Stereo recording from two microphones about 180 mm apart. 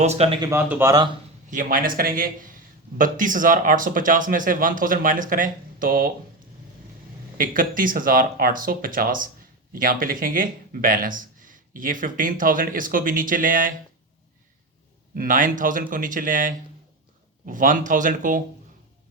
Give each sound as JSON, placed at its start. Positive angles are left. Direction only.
{"t": 0.0, "sound": "speech", "side_deg": -35}
{"t": 0.5, "sound": "speech", "side_deg": -15}
{"t": 1.5, "sound": "speech", "side_deg": -45}
{"t": 7.3, "sound": "speech", "side_deg": -50}
{"t": 15.1, "sound": "speech", "side_deg": -50}